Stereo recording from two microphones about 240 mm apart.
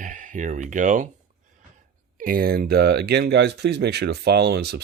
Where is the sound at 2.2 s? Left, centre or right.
Right.